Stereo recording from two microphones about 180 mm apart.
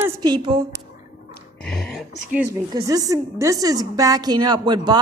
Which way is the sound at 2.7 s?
20° right (ahead or behind).